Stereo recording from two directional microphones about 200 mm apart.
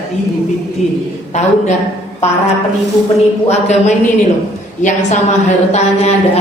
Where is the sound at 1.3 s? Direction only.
35° left (ahead or behind).